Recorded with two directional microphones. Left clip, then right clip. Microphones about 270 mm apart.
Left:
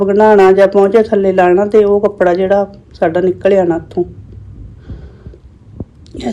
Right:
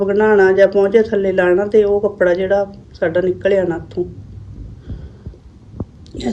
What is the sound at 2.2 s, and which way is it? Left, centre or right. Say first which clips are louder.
Speech: left 2 dB; centre.